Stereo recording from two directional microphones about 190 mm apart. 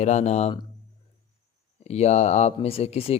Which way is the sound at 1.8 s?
35° left (ahead or behind).